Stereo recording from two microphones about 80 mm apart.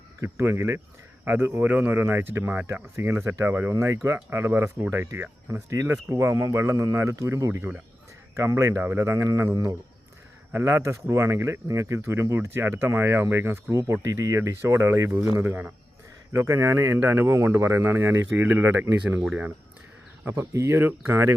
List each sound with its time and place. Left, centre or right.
0.2 s speech: right
1.6 s speech: centre
3.8 s speech: right
5.7 s speech: right
10.5 s speech: right
15.4 s speech: right
16.3 s speech: right
19.2 s speech: centre
20.2 s speech: right